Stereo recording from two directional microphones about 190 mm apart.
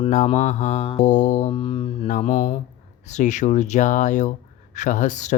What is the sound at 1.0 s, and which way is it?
Speech, 40° left (ahead or behind).